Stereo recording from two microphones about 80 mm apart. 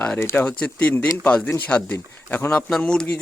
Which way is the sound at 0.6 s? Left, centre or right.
Centre.